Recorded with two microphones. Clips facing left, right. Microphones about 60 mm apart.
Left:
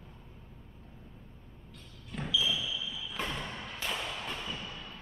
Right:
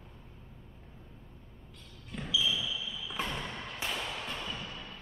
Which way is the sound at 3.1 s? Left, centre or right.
Centre.